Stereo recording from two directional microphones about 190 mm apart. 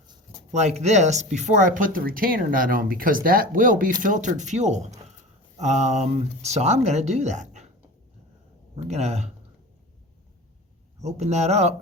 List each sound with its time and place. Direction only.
0.5 s speech: 35° right (ahead or behind)
8.7 s speech: 35° right (ahead or behind)
11.0 s speech: 35° right (ahead or behind)